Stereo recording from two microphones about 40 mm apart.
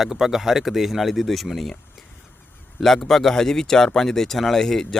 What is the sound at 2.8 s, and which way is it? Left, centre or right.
Speech, centre.